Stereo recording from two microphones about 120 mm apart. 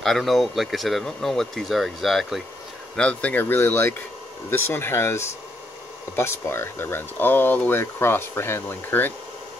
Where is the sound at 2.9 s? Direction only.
10° left (ahead or behind).